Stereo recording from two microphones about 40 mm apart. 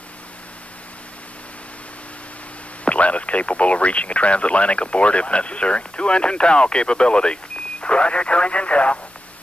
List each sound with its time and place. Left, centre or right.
2.8 s speech: left